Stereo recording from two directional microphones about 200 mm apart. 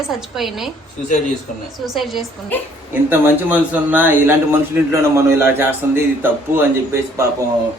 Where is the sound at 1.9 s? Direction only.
Centre (ahead or behind).